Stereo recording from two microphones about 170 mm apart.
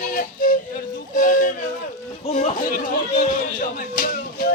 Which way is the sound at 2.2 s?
45° left (ahead or behind).